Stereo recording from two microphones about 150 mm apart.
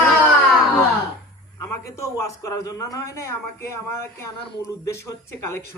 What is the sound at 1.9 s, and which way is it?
A man's voice, 20° left (ahead or behind).